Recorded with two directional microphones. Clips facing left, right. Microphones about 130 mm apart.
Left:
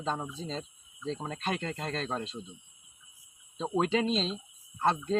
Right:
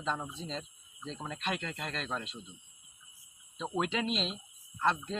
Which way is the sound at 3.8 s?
35° left (ahead or behind).